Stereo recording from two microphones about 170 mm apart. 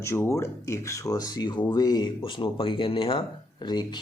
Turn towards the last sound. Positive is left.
turn(degrees=25)  # may be behind; listen again after turning